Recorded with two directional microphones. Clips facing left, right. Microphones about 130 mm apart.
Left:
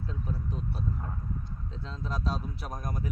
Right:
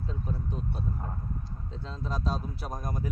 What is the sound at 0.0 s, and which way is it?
Speech, centre (ahead or behind).